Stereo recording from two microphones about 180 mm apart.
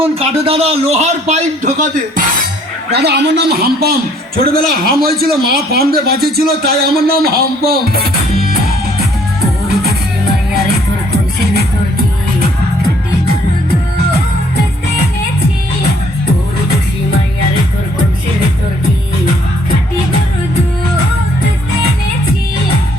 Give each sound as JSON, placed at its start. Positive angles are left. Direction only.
{"t": 0.0, "sound": "a man's voice", "side_deg": -35}
{"t": 2.9, "sound": "a man's voice", "side_deg": -65}